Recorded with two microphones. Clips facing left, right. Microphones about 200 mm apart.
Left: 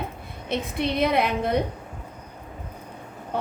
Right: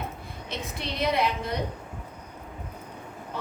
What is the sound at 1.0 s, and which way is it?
Speech, 55° left (ahead or behind).